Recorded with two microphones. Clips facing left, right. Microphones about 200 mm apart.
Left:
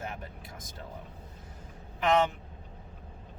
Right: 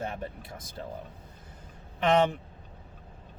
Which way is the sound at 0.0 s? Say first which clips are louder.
Right 5 dB; 30° right (ahead or behind).